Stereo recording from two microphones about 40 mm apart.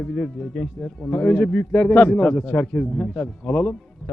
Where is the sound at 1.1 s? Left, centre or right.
Left.